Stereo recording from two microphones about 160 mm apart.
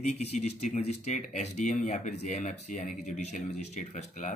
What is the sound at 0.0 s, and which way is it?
Speech, 45° left (ahead or behind).